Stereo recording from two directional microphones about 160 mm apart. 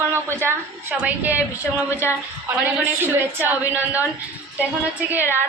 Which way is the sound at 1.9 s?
15° left (ahead or behind).